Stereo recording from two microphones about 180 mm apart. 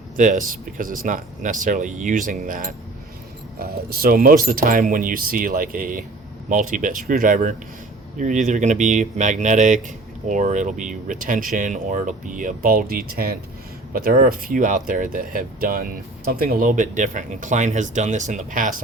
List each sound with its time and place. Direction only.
0.2 s speech: 45° right (ahead or behind)